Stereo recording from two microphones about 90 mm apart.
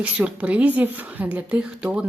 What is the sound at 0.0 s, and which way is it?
A woman's voice, 15° right (ahead or behind).